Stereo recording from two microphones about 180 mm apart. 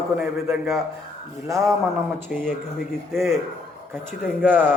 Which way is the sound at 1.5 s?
15° right (ahead or behind).